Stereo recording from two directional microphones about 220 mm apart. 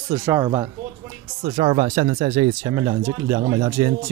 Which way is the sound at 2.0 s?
30° right (ahead or behind).